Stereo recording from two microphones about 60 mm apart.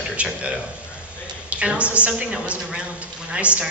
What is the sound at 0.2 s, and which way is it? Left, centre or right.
A man's voice, right.